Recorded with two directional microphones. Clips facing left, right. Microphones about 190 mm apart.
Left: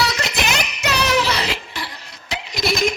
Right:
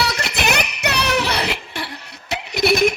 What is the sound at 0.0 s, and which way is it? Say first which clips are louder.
Music: even; 55° right (ahead or behind).